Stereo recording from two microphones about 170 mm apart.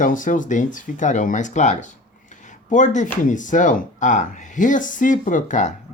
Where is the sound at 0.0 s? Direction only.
50° left (ahead or behind).